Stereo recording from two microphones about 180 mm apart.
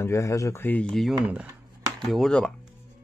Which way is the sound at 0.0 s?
15° left (ahead or behind).